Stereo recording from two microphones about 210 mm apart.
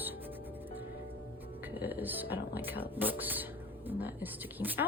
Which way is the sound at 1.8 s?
10° right (ahead or behind).